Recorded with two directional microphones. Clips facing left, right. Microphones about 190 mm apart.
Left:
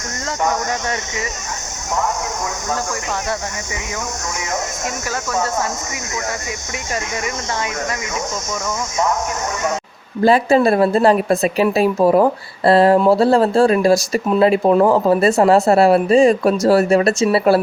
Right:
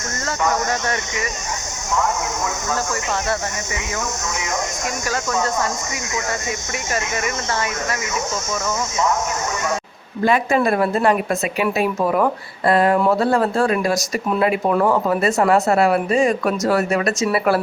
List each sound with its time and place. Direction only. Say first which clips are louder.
10.2 s a woman's voice: left 4 dB; 30° left (ahead or behind)